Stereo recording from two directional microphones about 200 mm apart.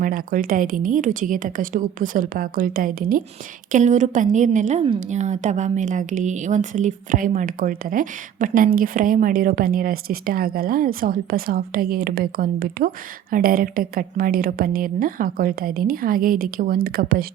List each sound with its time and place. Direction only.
0.0 s a woman's voice: 45° right (ahead or behind)